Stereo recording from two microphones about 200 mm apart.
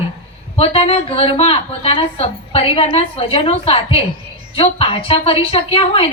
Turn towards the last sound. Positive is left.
turn(degrees=30)  # may be behind; listen again after turning